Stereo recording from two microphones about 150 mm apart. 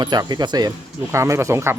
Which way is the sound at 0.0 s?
25° right (ahead or behind).